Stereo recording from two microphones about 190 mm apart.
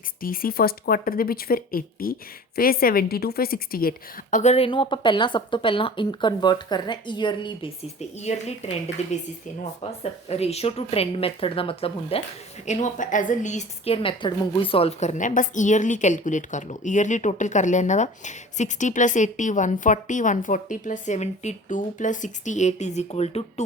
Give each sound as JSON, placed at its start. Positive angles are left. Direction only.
{"t": 0.2, "sound": "a woman's voice", "side_deg": 50}
{"t": 8.2, "sound": "a woman's voice", "side_deg": 35}